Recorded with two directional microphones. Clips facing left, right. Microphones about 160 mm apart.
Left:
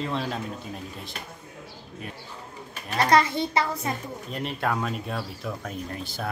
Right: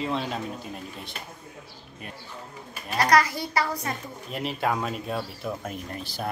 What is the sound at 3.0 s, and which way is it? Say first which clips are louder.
Speech: left 1 dB; 25° left (ahead or behind).